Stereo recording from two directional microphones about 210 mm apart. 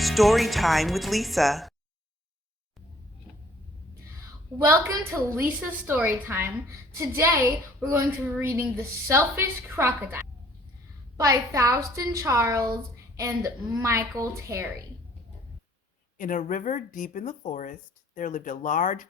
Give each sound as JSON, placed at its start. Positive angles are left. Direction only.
{"t": 0.0, "sound": "speech", "side_deg": 0}
{"t": 4.5, "sound": "a woman's voice", "side_deg": -10}
{"t": 16.1, "sound": "speech", "side_deg": 40}